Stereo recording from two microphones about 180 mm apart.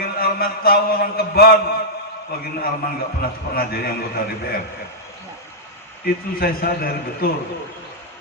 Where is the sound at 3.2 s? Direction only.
55° left (ahead or behind).